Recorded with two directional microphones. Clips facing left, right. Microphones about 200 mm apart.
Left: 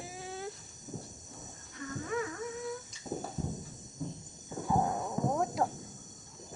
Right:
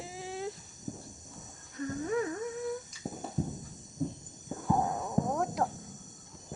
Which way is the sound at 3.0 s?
40° right (ahead or behind).